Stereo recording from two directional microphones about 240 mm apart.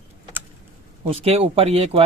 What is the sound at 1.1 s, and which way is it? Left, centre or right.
Speech, right.